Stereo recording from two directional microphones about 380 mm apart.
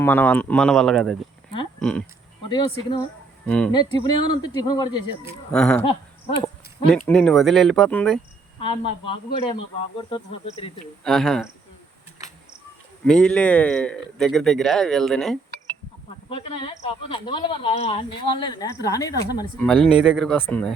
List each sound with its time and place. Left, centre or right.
0.0 s speech: centre
9.3 s speech: centre
11.0 s speech: centre
13.1 s speech: centre
16.3 s speech: centre